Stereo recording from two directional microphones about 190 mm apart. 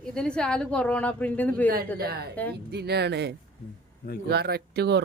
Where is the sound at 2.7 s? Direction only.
60° right (ahead or behind).